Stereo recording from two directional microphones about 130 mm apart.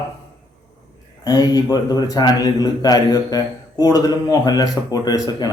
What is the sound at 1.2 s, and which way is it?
A man's voice, 30° left (ahead or behind).